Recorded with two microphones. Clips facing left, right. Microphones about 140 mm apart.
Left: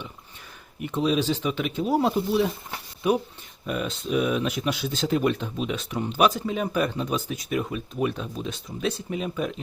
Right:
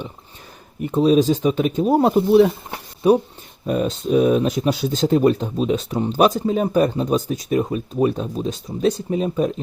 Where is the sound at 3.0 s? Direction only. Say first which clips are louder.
Right 8 dB; 35° right (ahead or behind).